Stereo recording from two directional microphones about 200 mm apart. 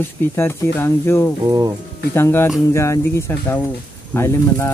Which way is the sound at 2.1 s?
10° left (ahead or behind).